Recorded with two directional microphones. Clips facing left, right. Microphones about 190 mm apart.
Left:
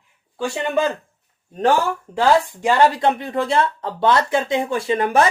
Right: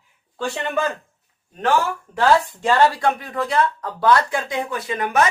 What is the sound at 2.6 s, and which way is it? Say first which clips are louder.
Speech: left 1 dB; 15° left (ahead or behind).